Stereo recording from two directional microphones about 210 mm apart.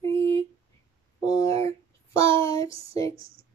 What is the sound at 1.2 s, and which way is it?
Speech, 15° left (ahead or behind).